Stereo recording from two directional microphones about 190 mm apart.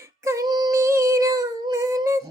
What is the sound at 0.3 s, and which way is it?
Child singing, 20° right (ahead or behind).